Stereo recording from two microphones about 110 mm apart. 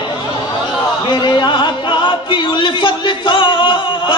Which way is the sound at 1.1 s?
45° left (ahead or behind).